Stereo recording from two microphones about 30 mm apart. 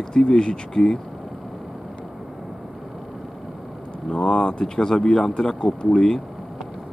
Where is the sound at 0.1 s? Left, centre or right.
Left.